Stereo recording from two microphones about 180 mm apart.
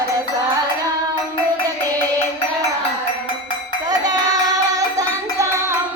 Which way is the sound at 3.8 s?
20° right (ahead or behind).